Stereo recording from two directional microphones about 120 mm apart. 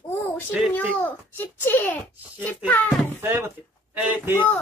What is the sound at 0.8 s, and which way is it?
A child's voice, 15° left (ahead or behind).